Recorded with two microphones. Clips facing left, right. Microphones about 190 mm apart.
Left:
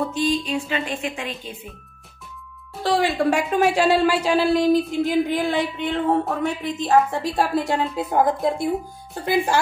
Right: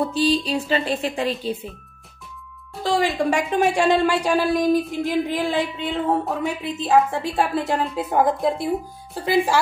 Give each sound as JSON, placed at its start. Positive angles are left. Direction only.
{"t": 0.1, "sound": "music", "side_deg": -35}
{"t": 2.7, "sound": "a woman's voice", "side_deg": 0}